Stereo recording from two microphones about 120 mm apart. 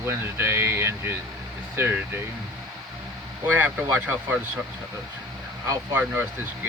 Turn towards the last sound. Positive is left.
turn(degrees=-15)  # may be behind; listen again after turning